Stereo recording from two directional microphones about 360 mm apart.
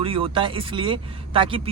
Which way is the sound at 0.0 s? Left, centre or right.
Centre.